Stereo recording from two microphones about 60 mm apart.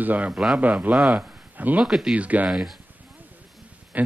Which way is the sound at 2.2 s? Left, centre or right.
Right.